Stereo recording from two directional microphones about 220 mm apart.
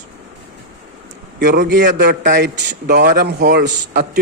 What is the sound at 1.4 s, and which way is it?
Speech, 45° right (ahead or behind).